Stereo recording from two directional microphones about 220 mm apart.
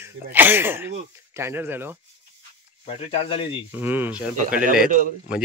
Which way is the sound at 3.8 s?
10° right (ahead or behind).